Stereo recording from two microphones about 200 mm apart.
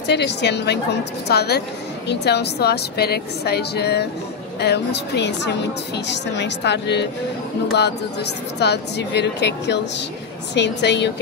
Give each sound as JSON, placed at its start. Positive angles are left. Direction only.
{"t": 0.0, "sound": "a woman's voice", "side_deg": 60}
{"t": 8.5, "sound": "a woman's voice", "side_deg": 60}